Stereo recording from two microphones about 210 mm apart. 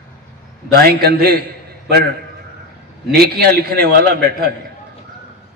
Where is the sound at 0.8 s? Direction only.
45° right (ahead or behind).